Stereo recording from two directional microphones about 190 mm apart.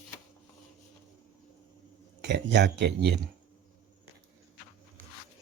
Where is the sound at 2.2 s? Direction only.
65° right (ahead or behind).